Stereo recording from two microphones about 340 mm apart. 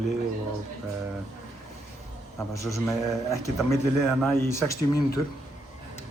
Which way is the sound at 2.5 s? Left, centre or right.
Centre.